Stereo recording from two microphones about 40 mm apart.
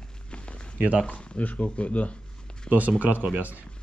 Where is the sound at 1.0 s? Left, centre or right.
Left.